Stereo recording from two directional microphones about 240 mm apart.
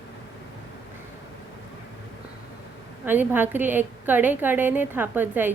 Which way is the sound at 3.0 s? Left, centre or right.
Centre.